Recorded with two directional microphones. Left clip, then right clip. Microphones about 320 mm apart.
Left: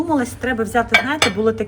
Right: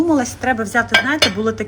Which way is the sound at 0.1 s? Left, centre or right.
Centre.